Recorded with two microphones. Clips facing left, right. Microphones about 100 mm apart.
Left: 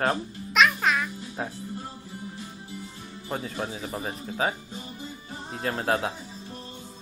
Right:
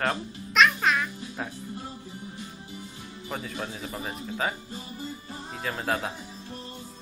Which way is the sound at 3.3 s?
30° left (ahead or behind).